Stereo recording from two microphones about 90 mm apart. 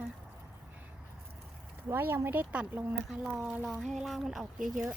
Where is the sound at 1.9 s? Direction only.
25° right (ahead or behind).